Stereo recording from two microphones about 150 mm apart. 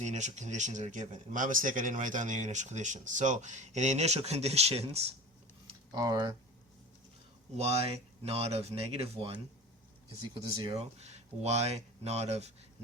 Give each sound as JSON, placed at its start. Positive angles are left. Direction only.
{"t": 0.0, "sound": "speech", "side_deg": -50}
{"t": 5.9, "sound": "speech", "side_deg": -25}
{"t": 7.5, "sound": "speech", "side_deg": -45}
{"t": 11.0, "sound": "speech", "side_deg": -45}